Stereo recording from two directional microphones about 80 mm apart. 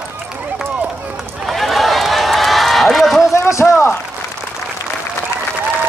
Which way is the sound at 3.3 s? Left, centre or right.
Left.